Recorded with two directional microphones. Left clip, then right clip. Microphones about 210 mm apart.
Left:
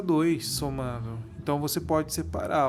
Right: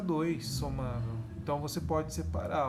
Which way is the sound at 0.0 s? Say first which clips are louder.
Left 8 dB; 50° left (ahead or behind).